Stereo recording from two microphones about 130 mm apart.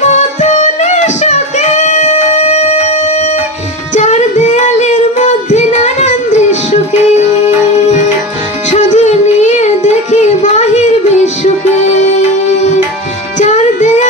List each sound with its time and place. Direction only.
0.1 s music: 65° left (ahead or behind)
3.9 s child singing: 65° left (ahead or behind)
8.6 s child singing: 65° left (ahead or behind)
13.4 s music: 65° left (ahead or behind)